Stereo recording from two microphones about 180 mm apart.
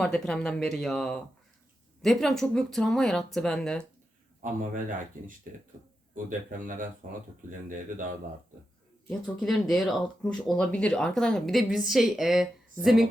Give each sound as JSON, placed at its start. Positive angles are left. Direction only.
{"t": 0.0, "sound": "speech", "side_deg": 5}
{"t": 4.6, "sound": "speech", "side_deg": -45}
{"t": 6.1, "sound": "speech", "side_deg": -50}
{"t": 9.0, "sound": "speech", "side_deg": 5}